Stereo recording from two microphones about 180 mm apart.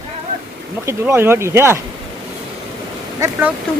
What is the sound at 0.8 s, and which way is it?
Speech, 15° right (ahead or behind).